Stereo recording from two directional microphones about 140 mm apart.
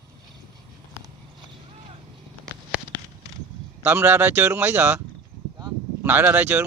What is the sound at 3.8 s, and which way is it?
Speech, 15° right (ahead or behind).